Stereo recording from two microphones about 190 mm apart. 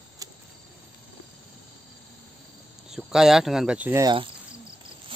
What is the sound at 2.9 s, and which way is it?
Speech, centre (ahead or behind).